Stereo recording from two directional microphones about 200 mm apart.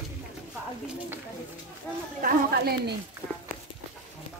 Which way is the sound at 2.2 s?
50° right (ahead or behind).